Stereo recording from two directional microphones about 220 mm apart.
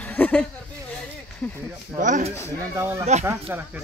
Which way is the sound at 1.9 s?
35° right (ahead or behind).